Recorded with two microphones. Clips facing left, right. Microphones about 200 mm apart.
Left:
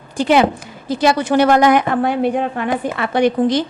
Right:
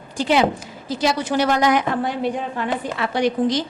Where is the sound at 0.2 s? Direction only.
55° left (ahead or behind).